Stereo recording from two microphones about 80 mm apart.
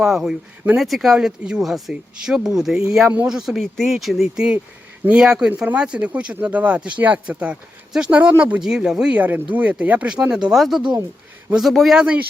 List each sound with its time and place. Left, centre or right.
0.0 s speech: centre
8.6 s speech: centre
9.1 s speech: centre
10.2 s speech: centre
11.9 s speech: centre